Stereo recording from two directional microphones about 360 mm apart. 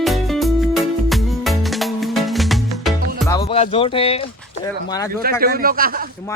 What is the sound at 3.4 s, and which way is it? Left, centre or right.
Speech, centre.